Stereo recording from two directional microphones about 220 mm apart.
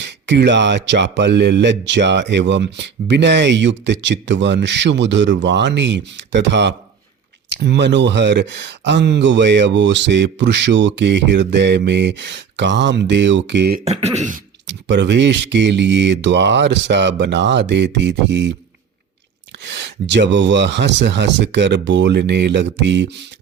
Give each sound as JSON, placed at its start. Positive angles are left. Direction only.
{"t": 0.0, "sound": "speech", "side_deg": -50}
{"t": 13.8, "sound": "speech", "side_deg": -30}
{"t": 14.7, "sound": "speech", "side_deg": -55}
{"t": 19.6, "sound": "speech", "side_deg": -50}